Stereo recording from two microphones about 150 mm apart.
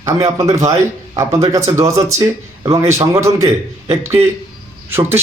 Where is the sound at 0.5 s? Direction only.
20° right (ahead or behind).